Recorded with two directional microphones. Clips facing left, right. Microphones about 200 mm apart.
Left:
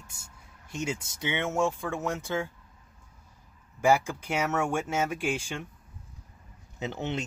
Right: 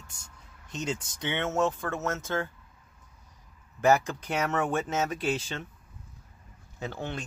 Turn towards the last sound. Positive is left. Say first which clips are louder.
# left 3 dB
turn(degrees=20)  # may be behind; listen again after turning